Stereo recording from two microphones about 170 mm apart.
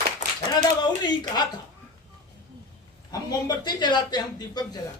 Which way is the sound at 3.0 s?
25° left (ahead or behind).